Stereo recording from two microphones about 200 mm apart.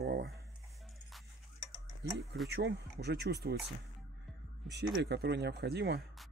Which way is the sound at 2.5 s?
60° right (ahead or behind).